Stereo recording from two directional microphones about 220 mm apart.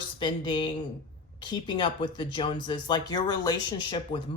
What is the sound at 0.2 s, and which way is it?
Speech, 20° left (ahead or behind).